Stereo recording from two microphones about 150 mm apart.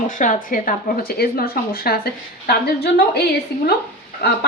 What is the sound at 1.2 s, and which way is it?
Speech, 90° left.